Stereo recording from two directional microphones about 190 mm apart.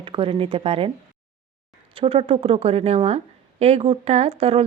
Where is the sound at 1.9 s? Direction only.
30° right (ahead or behind).